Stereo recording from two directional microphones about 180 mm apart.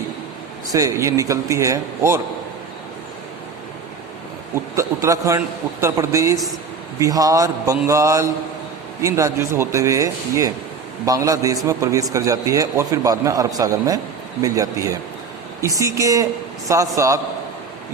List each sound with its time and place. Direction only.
0.7 s speech: 15° right (ahead or behind)
4.7 s a man's voice: 15° right (ahead or behind)